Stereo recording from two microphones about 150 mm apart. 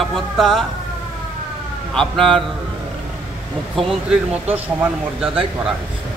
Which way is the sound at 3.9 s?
10° right (ahead or behind).